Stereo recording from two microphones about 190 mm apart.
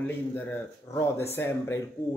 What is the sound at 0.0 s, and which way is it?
A man's voice, 10° left (ahead or behind).